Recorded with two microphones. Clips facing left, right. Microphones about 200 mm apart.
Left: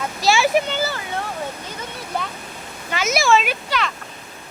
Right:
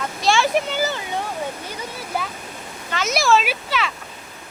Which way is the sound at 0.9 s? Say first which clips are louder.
Right 1 dB; 20° right (ahead or behind).